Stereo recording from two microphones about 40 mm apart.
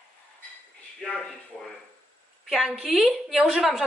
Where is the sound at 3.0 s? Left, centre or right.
Centre.